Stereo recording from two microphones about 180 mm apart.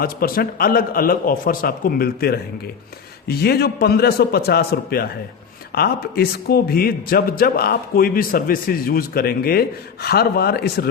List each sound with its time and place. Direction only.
0.0 s a man's voice: 55° left (ahead or behind)